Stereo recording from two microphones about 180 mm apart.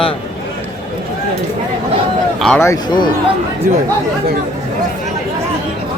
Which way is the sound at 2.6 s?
20° left (ahead or behind).